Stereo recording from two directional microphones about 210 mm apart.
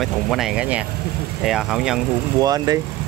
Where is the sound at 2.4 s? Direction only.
20° right (ahead or behind).